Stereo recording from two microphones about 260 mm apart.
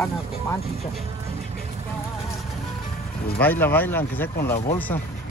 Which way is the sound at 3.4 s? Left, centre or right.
Centre.